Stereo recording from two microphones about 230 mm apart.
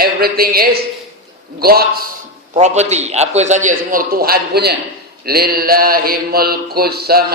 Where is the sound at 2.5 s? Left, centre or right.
Right.